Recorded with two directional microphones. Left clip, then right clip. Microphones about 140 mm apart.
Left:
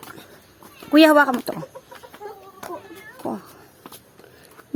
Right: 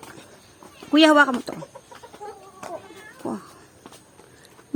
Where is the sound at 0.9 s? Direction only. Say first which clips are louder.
Left 2 dB; 25° left (ahead or behind).